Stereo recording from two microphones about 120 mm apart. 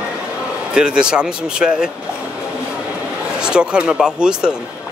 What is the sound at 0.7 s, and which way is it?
Speech, 5° right (ahead or behind).